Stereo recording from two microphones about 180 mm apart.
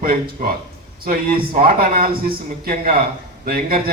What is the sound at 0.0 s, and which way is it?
A man's voice, 50° right (ahead or behind).